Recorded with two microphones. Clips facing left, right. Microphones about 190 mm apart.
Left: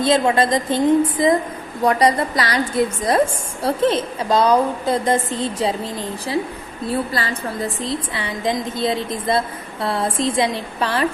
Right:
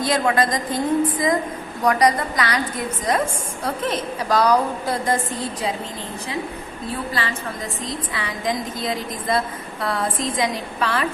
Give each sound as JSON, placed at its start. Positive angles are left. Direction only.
{"t": 0.0, "sound": "a woman's voice", "side_deg": 25}
{"t": 7.1, "sound": "a woman's voice", "side_deg": 40}